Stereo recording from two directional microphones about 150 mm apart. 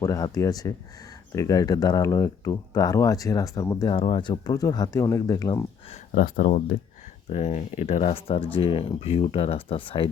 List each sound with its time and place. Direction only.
0.0 s speech: 20° left (ahead or behind)
6.1 s speech: 75° left (ahead or behind)
7.3 s speech: 50° left (ahead or behind)